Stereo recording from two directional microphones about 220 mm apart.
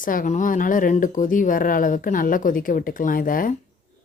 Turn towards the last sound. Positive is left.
turn(degrees=40)  # may be behind; listen again after turning